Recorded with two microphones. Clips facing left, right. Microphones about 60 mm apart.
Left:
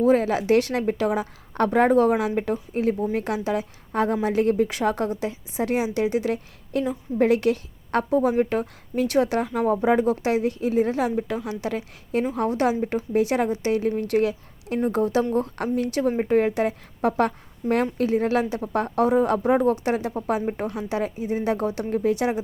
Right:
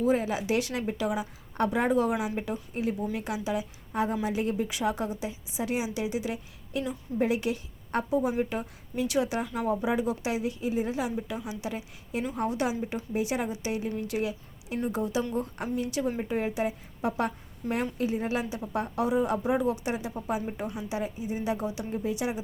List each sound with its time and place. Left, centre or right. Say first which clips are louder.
0.0 s a woman's voice: left 7 dB; left